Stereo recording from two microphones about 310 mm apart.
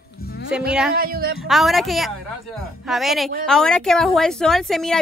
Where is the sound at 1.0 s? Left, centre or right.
Right.